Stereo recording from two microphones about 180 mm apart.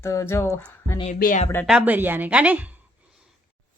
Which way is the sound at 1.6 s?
5° right (ahead or behind).